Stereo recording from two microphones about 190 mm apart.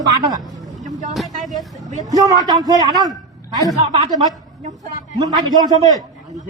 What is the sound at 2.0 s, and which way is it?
Speech, 20° right (ahead or behind).